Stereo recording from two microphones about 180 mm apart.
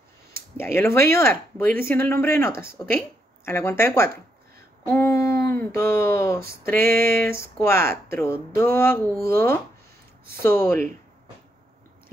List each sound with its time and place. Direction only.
0.6 s speech: 15° left (ahead or behind)